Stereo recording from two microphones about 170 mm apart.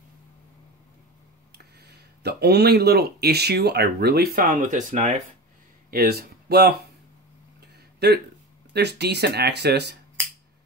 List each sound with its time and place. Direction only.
1.5 s speech: 70° right (ahead or behind); by 5.2 s 45° right (ahead or behind)
5.9 s speech: 65° right (ahead or behind)
7.6 s a sound: 70° right (ahead or behind)
8.7 s speech: 75° right (ahead or behind)